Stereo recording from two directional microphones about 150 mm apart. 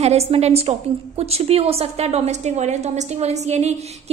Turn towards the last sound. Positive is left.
turn(degrees=-45)  # may be behind; listen again after turning